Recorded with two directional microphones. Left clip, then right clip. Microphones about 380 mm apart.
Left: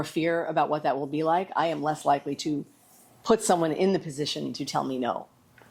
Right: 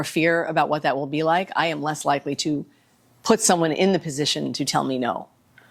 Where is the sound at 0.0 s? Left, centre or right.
Right.